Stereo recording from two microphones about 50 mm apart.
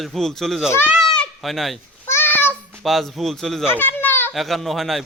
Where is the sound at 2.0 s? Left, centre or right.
Left.